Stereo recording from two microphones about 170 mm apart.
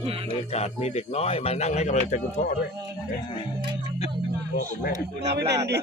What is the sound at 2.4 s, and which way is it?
Speech, 55° left (ahead or behind).